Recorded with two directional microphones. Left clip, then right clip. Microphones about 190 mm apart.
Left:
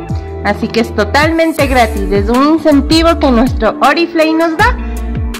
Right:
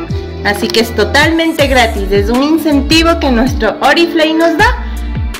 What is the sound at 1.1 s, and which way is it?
A woman's voice, 50° left (ahead or behind).